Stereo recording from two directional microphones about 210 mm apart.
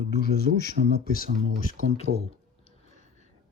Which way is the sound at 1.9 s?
30° left (ahead or behind).